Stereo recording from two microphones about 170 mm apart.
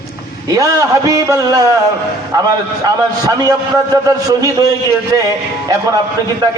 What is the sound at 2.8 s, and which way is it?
A man's voice, 20° right (ahead or behind).